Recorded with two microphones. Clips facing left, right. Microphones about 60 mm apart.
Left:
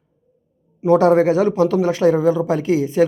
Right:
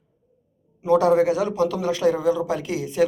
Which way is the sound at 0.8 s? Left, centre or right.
Left.